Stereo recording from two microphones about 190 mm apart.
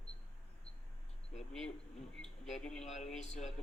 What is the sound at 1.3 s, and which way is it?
A man's voice, centre (ahead or behind).